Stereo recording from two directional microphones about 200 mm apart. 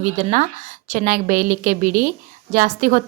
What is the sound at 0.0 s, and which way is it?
A woman's voice, 40° right (ahead or behind).